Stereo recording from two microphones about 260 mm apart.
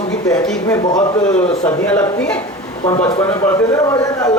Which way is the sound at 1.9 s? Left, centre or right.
Centre.